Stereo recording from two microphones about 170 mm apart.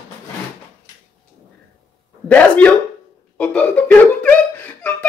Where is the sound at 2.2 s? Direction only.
10° left (ahead or behind).